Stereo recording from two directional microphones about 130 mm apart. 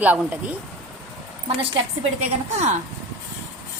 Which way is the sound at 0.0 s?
10° right (ahead or behind).